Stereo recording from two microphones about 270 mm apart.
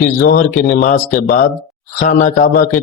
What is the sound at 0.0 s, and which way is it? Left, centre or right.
Speech, left.